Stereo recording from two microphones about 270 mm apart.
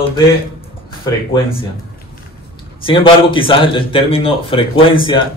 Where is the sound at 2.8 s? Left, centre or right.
Centre.